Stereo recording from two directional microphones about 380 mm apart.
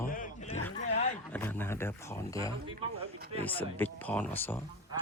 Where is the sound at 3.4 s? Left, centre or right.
Centre.